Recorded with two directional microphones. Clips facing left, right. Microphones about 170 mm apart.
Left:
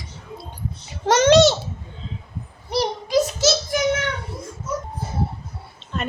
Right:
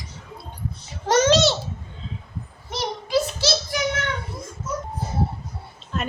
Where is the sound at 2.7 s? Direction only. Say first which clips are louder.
Left 3 dB; 35° left (ahead or behind).